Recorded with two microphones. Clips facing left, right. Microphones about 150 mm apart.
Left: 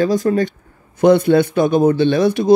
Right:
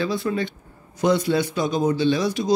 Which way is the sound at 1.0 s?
55° left (ahead or behind).